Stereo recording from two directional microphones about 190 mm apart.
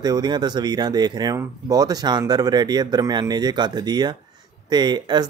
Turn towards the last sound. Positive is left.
turn(degrees=-25)  # may be behind; listen again after turning